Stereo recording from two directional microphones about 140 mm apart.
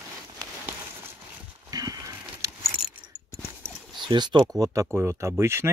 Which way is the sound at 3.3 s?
Centre (ahead or behind).